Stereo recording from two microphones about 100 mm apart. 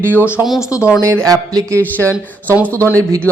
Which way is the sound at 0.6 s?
35° left (ahead or behind).